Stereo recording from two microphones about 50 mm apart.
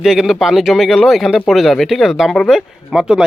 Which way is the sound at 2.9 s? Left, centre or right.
Centre.